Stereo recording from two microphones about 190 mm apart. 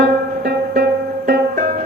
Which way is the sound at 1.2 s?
50° right (ahead or behind).